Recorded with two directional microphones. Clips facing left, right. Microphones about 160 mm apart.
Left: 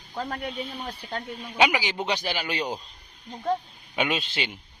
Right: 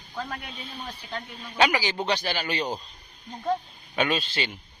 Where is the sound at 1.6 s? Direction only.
15° left (ahead or behind).